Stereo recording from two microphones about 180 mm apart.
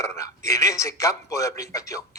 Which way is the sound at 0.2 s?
15° left (ahead or behind).